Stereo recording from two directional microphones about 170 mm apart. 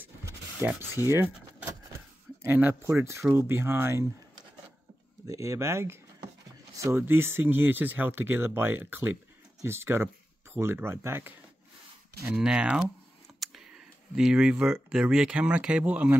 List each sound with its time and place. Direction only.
0.0 s keys jangling: 15° right (ahead or behind)
2.4 s speech: 10° right (ahead or behind)
5.2 s speech: 15° right (ahead or behind)